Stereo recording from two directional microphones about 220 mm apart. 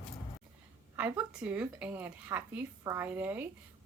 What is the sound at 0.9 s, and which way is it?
Speech, 5° right (ahead or behind).